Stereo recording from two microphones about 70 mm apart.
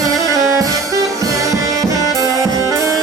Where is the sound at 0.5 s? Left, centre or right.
Right.